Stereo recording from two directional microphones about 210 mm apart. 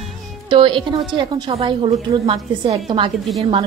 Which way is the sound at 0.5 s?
25° right (ahead or behind).